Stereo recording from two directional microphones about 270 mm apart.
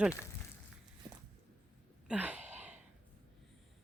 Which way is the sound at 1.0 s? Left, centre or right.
Centre.